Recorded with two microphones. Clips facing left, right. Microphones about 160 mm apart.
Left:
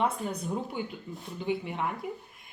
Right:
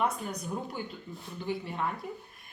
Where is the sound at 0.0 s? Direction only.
30° left (ahead or behind).